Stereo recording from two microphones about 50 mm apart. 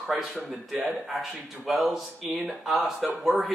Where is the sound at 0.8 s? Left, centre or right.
Centre.